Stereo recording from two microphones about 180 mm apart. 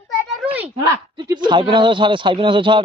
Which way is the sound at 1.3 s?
25° right (ahead or behind).